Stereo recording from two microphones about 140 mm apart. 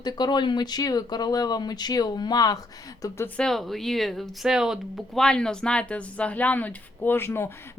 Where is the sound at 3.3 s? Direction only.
5° left (ahead or behind).